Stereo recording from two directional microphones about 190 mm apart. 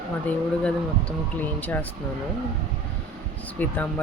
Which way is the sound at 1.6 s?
10° left (ahead or behind).